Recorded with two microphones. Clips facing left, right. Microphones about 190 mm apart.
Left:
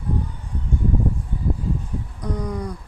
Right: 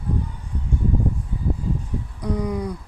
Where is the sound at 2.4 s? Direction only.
5° right (ahead or behind).